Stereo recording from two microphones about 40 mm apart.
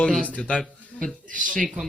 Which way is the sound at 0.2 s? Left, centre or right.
Left.